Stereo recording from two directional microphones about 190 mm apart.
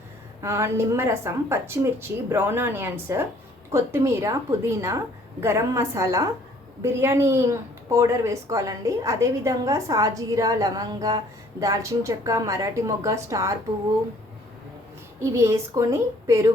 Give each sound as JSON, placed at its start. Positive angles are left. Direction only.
{"t": 0.4, "sound": "speech", "side_deg": -15}
{"t": 15.2, "sound": "speech", "side_deg": -15}